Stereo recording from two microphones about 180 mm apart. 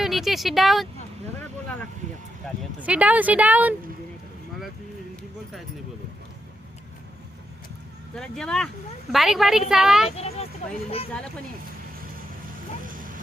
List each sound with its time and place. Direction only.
0.0 s speech: centre (ahead or behind)
2.8 s a woman's voice: 5° right (ahead or behind)
8.1 s a woman's voice: 5° left (ahead or behind)
10.1 s a child's voice: 35° left (ahead or behind)
12.8 s music: 50° right (ahead or behind)